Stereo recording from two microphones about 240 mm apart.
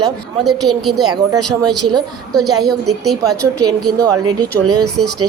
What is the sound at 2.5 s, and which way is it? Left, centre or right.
Speech, centre.